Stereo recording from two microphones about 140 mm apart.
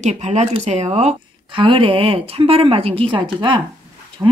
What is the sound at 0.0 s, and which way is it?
Speech, 55° right (ahead or behind).